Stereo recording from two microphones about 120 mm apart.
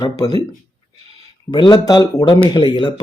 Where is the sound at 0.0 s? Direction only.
35° left (ahead or behind).